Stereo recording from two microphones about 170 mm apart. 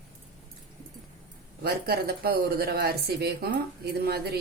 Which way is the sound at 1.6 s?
65° right (ahead or behind).